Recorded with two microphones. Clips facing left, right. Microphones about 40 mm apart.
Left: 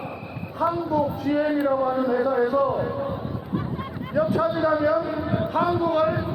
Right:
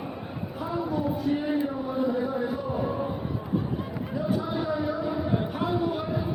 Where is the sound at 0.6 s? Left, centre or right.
Left.